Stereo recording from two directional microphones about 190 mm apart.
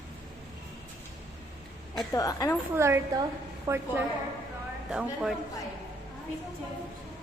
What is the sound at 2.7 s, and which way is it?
A woman's voice, 15° right (ahead or behind).